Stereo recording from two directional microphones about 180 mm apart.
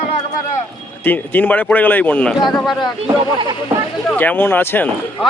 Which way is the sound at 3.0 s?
25° right (ahead or behind).